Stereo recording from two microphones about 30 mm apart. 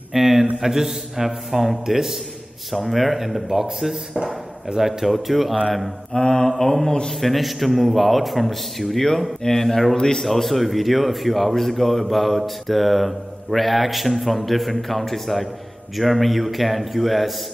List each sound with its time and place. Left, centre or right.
0.1 s a sound: centre
0.6 s a man's voice: centre
2.9 s speech: centre
3.9 s speech: right
4.8 s speech: centre
6.1 s mantra: centre
6.6 s speech: centre
7.1 s speech: centre
9.9 s mantra: left
10.2 s speech: centre